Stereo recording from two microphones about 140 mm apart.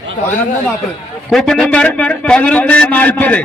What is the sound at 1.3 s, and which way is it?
A man's voice, centre (ahead or behind).